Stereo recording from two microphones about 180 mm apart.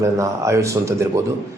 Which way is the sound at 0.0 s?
15° right (ahead or behind).